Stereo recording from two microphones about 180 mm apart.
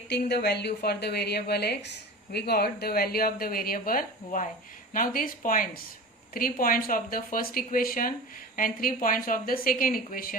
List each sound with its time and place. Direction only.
0.1 s a woman's voice: 65° left (ahead or behind)